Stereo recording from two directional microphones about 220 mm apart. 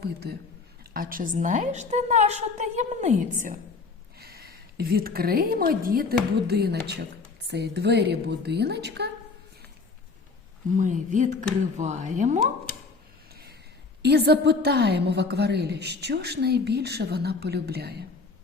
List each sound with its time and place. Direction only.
0.0 s a woman's voice: 45° right (ahead or behind)
10.8 s a woman's voice: 35° right (ahead or behind)
14.0 s a woman's voice: 50° right (ahead or behind)